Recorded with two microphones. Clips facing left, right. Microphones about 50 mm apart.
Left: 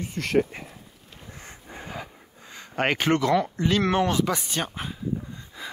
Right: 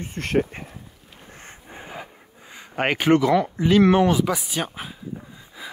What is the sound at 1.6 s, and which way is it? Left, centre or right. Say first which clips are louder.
Gasp: even; centre.